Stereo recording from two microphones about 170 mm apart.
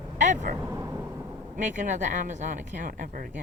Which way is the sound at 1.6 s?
45° right (ahead or behind).